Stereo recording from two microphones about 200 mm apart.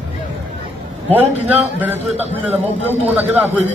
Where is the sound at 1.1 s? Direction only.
10° right (ahead or behind).